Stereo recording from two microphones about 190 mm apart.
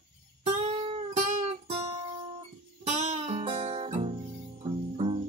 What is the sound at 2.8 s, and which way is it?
Guitar, 35° right (ahead or behind).